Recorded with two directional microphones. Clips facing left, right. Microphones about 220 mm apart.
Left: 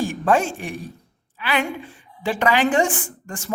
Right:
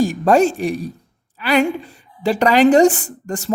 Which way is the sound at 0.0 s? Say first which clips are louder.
Right 6 dB; 40° right (ahead or behind).